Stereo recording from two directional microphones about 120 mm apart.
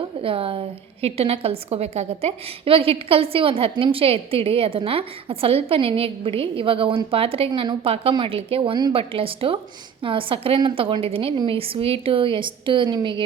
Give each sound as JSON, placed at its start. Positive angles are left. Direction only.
{"t": 0.2, "sound": "a woman's voice", "side_deg": -50}